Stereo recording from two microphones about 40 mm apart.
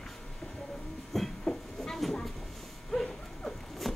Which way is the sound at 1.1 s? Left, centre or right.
Centre.